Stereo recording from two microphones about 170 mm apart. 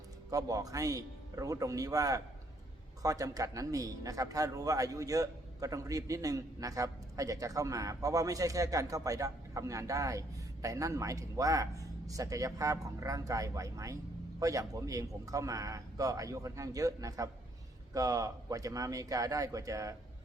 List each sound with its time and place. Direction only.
0.3 s speech: 20° right (ahead or behind)